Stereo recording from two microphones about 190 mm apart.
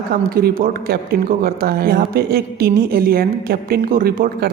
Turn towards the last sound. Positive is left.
turn(degrees=-50)  # may be behind; listen again after turning